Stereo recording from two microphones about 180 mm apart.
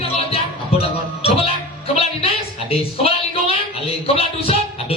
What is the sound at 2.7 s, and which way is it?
Music, 30° left (ahead or behind).